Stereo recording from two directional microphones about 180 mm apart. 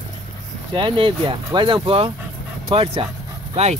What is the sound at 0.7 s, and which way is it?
Speech, 30° right (ahead or behind).